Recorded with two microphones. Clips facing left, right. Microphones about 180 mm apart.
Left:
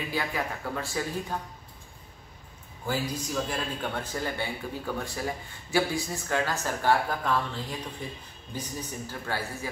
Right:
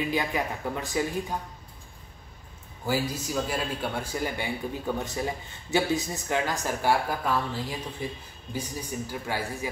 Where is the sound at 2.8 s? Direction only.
5° right (ahead or behind).